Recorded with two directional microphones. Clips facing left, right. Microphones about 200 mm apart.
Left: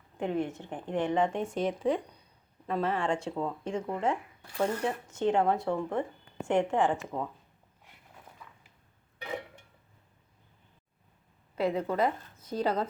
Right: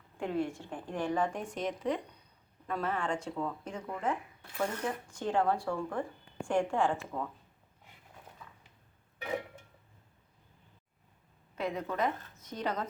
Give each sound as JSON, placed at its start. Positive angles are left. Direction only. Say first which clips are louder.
{"t": 0.2, "sound": "a woman's voice", "louder": "left 2 dB", "side_deg": 20}
{"t": 11.5, "sound": "a woman's voice", "louder": "left 6 dB", "side_deg": 30}